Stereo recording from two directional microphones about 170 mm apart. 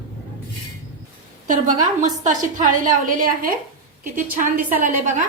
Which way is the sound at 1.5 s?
50° right (ahead or behind).